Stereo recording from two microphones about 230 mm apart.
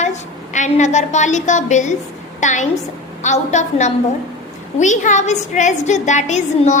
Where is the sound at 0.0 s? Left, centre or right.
Left.